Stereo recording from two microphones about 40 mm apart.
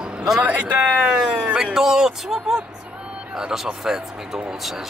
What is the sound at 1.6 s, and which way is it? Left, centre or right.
Speech, centre.